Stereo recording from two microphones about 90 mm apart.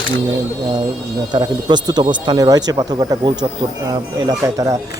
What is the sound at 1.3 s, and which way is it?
Speech, 55° right (ahead or behind).